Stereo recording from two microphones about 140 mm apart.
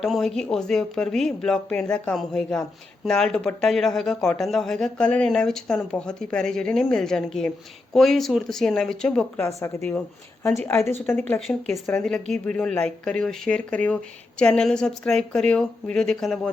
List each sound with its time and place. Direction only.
0.0 s speech: centre (ahead or behind)
9.4 s a woman's voice: 20° left (ahead or behind)
10.6 s speech: 10° left (ahead or behind)
11.3 s speech: centre (ahead or behind)